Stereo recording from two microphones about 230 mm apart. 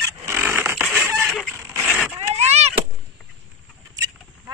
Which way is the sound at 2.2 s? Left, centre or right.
Right.